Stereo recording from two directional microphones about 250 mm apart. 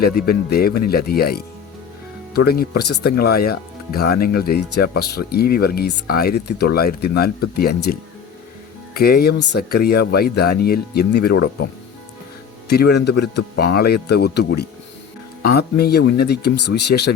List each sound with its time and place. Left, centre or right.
0.0 s speech: left
9.0 s speech: left
12.6 s speech: left